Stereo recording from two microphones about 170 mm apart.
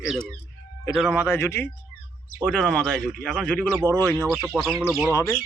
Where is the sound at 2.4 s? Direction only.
5° left (ahead or behind).